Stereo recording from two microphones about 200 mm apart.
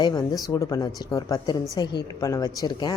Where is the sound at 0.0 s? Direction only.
20° left (ahead or behind).